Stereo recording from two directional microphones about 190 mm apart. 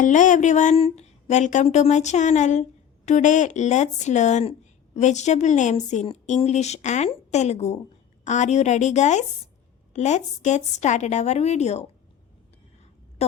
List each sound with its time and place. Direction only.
0.0 s speech: 40° left (ahead or behind)